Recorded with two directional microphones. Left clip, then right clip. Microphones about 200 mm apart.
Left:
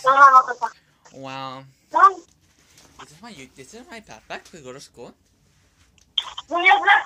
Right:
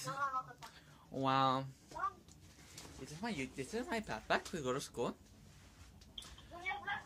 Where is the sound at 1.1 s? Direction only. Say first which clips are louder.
Even; 5° right (ahead or behind).